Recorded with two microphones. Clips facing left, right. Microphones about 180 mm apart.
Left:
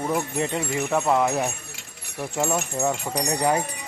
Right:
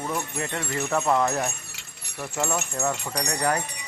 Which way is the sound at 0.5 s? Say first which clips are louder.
Even; 10° left (ahead or behind).